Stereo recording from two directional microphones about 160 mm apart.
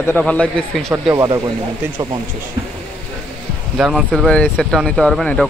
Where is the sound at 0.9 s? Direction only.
20° right (ahead or behind).